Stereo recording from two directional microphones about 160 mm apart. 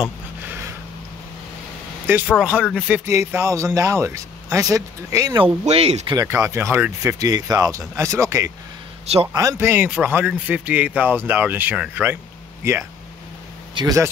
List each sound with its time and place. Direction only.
0.0 s a sound: 10° right (ahead or behind)
2.3 s speech: 5° right (ahead or behind); by 5.5 s 25° right (ahead or behind)
5.7 s speech: 40° right (ahead or behind)
6.1 s speech: 20° right (ahead or behind)
9.0 s a man's voice: 40° right (ahead or behind)
9.3 s speech: 20° right (ahead or behind)
13.7 s speech: 25° right (ahead or behind)